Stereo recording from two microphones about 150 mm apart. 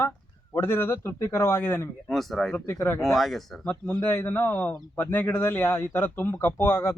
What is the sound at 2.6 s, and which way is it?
Speech, 15° left (ahead or behind).